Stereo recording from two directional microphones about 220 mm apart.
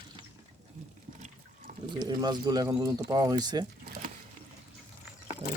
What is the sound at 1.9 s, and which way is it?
Speech, 20° right (ahead or behind).